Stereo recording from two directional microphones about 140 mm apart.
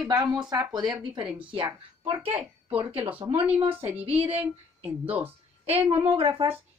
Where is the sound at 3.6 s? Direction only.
40° right (ahead or behind).